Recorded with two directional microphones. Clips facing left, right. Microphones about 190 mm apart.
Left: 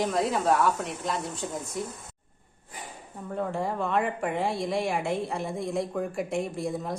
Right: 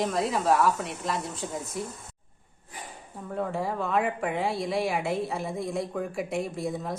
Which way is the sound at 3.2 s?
Centre (ahead or behind).